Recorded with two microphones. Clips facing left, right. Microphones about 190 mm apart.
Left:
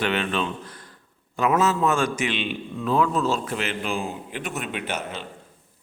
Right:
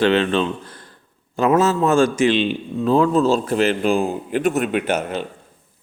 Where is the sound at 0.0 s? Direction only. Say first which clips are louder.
Right 8 dB; 30° right (ahead or behind); by 5.2 s 50° right (ahead or behind).